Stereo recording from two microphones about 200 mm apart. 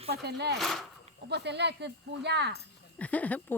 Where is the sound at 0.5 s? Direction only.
Centre (ahead or behind).